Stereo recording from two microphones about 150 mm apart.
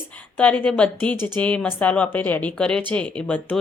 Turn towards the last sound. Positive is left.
turn(degrees=10)  # may be behind; listen again after turning